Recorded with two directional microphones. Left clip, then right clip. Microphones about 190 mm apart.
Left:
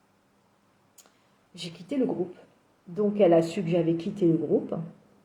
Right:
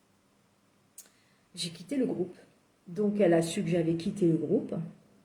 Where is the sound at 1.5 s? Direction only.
10° right (ahead or behind).